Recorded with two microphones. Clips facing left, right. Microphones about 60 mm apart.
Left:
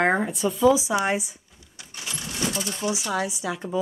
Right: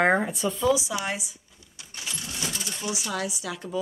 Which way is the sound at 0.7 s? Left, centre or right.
Left.